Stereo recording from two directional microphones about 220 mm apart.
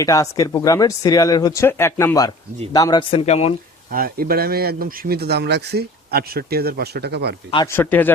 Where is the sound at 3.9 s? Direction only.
40° right (ahead or behind).